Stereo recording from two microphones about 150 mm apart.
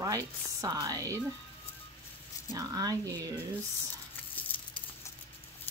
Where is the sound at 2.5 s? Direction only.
25° right (ahead or behind).